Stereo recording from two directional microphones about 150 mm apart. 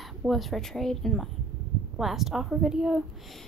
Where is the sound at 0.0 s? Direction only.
Centre (ahead or behind).